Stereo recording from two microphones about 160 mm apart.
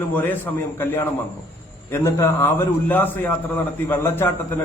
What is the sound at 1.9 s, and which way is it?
A man's voice, 15° left (ahead or behind).